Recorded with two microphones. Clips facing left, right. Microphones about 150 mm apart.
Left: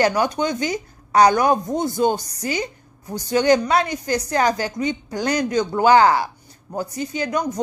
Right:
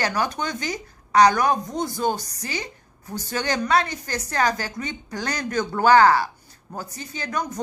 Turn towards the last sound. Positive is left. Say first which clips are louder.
# left 6 dB
turn(degrees=20)  # may be behind; listen again after turning